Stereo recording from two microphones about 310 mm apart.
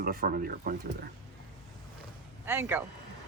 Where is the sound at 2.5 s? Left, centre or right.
Centre.